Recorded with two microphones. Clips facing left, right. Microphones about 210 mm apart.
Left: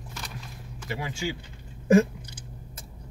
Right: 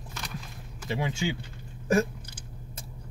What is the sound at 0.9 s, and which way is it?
Speech, 25° right (ahead or behind).